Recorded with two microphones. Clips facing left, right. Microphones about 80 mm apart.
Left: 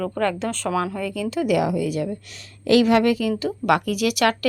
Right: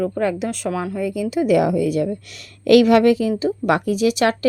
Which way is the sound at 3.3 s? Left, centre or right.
Right.